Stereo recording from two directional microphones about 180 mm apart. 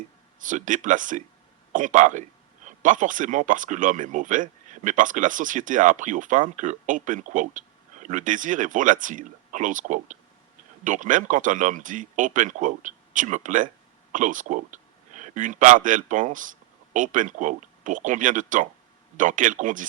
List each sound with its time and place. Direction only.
0.3 s speech: 45° right (ahead or behind)